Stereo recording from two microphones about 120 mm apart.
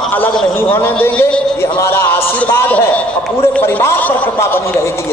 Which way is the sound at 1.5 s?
20° left (ahead or behind).